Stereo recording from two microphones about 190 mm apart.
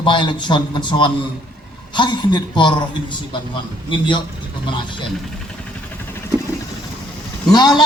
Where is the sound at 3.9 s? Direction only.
25° left (ahead or behind).